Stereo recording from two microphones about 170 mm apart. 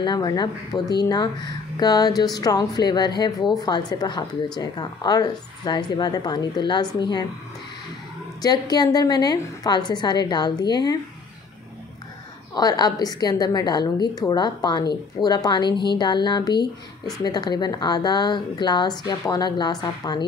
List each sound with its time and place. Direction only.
0.0 s a woman's voice: 25° left (ahead or behind)
8.4 s a woman's voice: 25° left (ahead or behind)
12.5 s a woman's voice: 25° left (ahead or behind)